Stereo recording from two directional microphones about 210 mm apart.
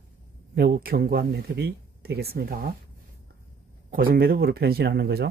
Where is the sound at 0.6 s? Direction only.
45° right (ahead or behind).